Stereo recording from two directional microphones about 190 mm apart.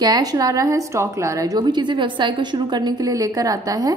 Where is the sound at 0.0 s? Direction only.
20° right (ahead or behind).